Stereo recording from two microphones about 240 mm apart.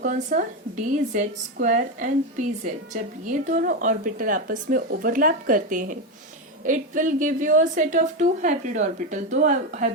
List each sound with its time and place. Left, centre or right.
0.0 s a woman's voice: right